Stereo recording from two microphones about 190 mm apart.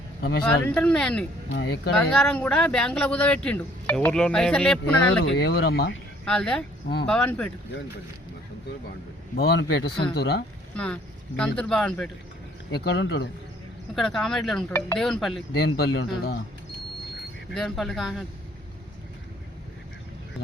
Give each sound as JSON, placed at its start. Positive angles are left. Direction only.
{"t": 0.2, "sound": "a man's voice", "side_deg": 55}
{"t": 0.6, "sound": "speech", "side_deg": 5}
{"t": 1.5, "sound": "speech", "side_deg": 60}
{"t": 2.0, "sound": "speech", "side_deg": 5}
{"t": 5.2, "sound": "speech", "side_deg": 70}
{"t": 6.2, "sound": "speech", "side_deg": 5}
{"t": 9.3, "sound": "speech", "side_deg": 60}
{"t": 10.8, "sound": "speech", "side_deg": 5}
{"t": 12.7, "sound": "speech", "side_deg": 60}
{"t": 13.9, "sound": "speech", "side_deg": 0}
{"t": 15.5, "sound": "speech", "side_deg": 60}
{"t": 17.2, "sound": "speech", "side_deg": 0}